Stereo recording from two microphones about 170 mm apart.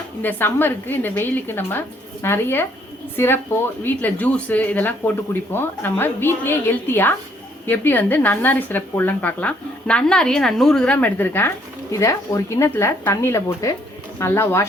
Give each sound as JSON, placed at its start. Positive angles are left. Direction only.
{"t": 0.2, "sound": "a woman's voice", "side_deg": 10}